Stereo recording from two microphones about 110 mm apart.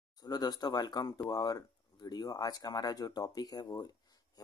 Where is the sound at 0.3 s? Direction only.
35° left (ahead or behind).